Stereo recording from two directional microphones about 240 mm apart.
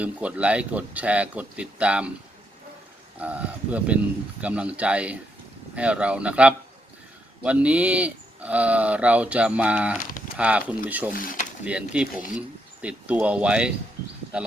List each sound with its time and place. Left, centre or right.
0.0 s speech: centre
3.2 s speech: centre
11.1 s speech: left
11.6 s speech: centre